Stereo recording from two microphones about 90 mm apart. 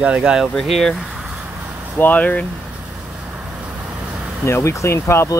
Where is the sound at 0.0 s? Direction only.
10° right (ahead or behind).